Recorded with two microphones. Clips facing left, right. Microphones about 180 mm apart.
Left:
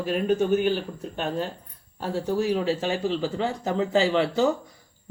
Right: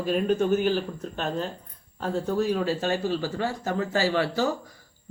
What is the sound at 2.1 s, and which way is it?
Speech, 10° left (ahead or behind).